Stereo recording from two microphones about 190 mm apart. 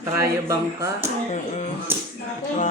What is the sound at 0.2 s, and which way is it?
Speech, 15° right (ahead or behind).